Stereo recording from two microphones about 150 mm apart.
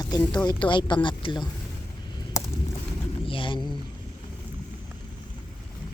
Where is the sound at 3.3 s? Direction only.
35° left (ahead or behind).